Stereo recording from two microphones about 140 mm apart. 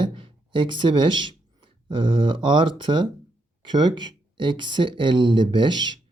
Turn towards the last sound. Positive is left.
turn(degrees=-30)  # may be behind; listen again after turning